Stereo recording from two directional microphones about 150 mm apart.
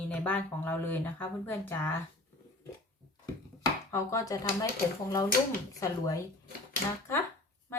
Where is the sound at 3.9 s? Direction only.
20° left (ahead or behind).